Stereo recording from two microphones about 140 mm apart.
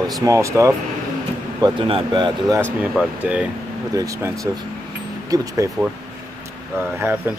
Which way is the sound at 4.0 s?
25° right (ahead or behind).